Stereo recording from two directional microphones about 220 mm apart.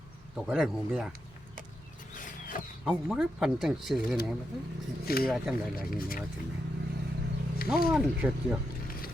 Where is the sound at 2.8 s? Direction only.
Centre (ahead or behind).